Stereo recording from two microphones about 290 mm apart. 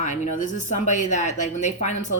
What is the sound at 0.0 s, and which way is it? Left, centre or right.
Speech, left.